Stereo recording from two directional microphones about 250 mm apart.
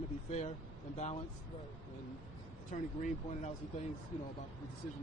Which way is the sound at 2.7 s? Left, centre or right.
Left.